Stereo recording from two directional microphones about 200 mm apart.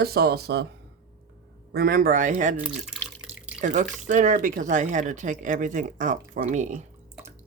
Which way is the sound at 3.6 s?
40° right (ahead or behind).